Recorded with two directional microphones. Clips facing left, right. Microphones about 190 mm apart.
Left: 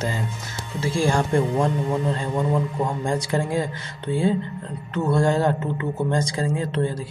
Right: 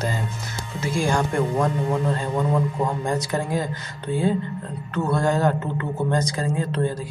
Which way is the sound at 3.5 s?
25° left (ahead or behind).